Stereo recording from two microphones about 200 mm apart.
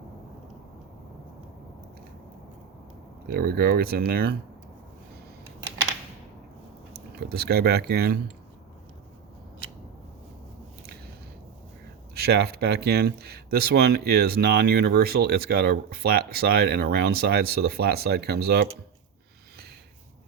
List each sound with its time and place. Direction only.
3.3 s speech: 50° right (ahead or behind)
7.3 s speech: 50° right (ahead or behind)
12.1 s speech: 50° right (ahead or behind)